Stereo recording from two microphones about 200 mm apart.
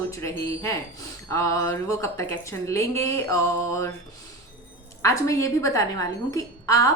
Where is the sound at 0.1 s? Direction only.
15° left (ahead or behind).